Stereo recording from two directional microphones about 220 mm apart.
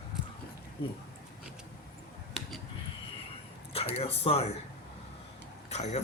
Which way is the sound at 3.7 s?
25° left (ahead or behind).